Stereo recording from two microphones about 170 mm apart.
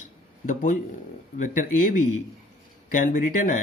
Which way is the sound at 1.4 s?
50° left (ahead or behind).